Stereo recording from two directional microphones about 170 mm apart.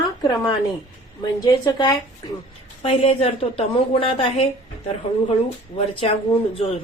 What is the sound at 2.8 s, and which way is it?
Speech, 35° left (ahead or behind).